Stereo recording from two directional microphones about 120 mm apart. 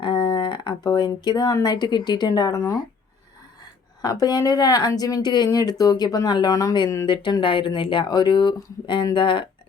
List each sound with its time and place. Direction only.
0.0 s speech: 40° left (ahead or behind)
4.0 s speech: 30° left (ahead or behind)